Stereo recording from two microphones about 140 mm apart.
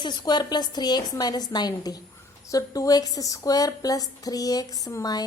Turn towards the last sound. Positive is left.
turn(degrees=25)  # may be behind; listen again after turning